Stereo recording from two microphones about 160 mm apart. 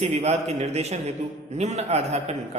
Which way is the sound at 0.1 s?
45° right (ahead or behind).